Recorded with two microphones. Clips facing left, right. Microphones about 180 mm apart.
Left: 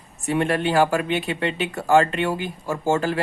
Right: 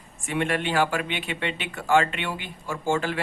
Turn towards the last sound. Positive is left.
turn(degrees=40)  # may be behind; listen again after turning